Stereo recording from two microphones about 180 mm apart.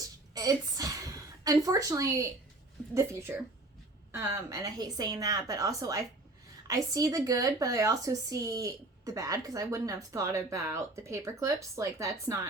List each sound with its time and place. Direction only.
0.3 s a woman's voice: 20° right (ahead or behind)